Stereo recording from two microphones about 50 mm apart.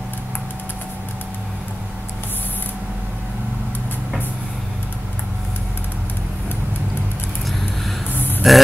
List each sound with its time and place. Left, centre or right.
8.4 s grunt: centre